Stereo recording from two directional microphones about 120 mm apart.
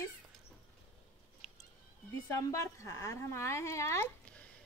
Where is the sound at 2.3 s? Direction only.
30° left (ahead or behind).